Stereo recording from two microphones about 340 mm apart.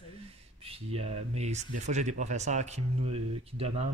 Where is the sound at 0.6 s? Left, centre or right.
Centre.